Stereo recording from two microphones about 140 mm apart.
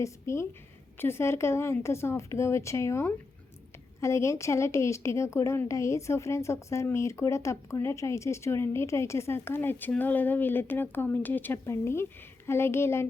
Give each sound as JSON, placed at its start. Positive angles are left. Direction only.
{"t": 0.0, "sound": "a woman's voice", "side_deg": 20}